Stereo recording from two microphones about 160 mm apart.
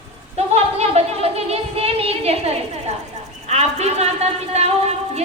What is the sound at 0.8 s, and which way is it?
A woman's voice, 40° right (ahead or behind).